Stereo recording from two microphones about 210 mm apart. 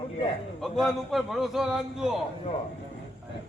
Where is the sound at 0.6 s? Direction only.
Centre (ahead or behind).